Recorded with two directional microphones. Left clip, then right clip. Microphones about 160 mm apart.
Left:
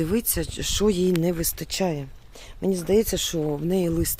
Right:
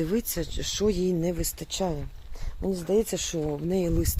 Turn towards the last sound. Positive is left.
turn(degrees=30)  # may be behind; listen again after turning